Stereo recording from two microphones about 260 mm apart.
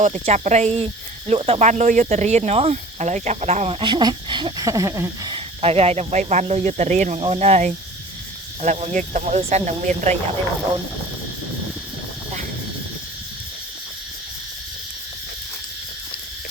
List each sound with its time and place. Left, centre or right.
0.0 s speech: right